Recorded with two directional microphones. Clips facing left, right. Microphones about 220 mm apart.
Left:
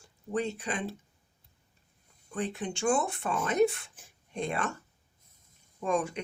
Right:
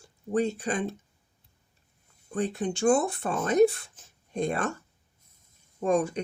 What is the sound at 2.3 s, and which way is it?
Speech, 40° right (ahead or behind).